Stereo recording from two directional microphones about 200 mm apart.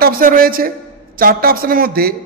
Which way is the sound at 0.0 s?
45° right (ahead or behind).